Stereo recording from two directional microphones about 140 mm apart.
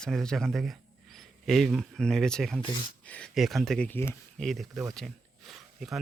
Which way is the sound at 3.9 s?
15° left (ahead or behind).